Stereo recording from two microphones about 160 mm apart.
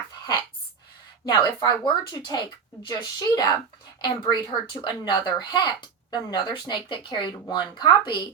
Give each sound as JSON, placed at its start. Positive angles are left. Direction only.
{"t": 1.2, "sound": "a woman's voice", "side_deg": 25}